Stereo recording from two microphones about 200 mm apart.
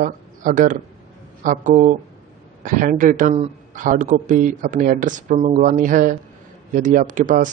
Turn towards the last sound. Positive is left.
turn(degrees=-40)  # may be behind; listen again after turning